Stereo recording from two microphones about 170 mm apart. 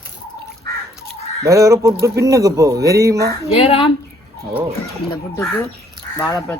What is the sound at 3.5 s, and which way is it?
Speech, 35° left (ahead or behind).